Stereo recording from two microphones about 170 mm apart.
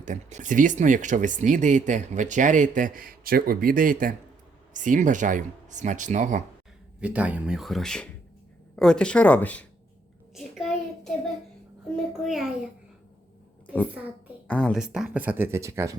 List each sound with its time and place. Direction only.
0.0 s speech: 45° right (ahead or behind)
7.0 s speech: 10° right (ahead or behind); by 9.6 s 10° left (ahead or behind)
10.3 s child singing: centre (ahead or behind)
11.9 s speech: centre (ahead or behind)
14.4 s speech: 5° left (ahead or behind); by 16.0 s 15° right (ahead or behind)